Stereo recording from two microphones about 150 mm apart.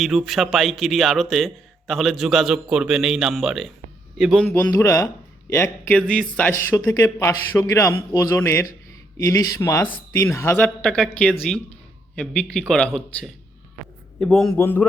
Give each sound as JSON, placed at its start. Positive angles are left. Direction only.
{"t": 0.0, "sound": "speech", "side_deg": 0}
{"t": 4.4, "sound": "speech", "side_deg": 15}
{"t": 10.8, "sound": "speech", "side_deg": 5}